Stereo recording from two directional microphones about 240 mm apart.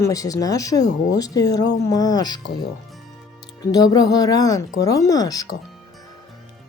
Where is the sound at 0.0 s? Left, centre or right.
Centre.